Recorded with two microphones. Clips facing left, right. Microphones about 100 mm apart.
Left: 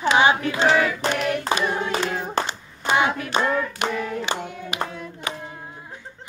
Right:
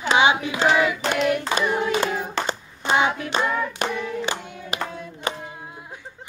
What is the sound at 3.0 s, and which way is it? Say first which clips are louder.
Hands: even; 25° right (ahead or behind).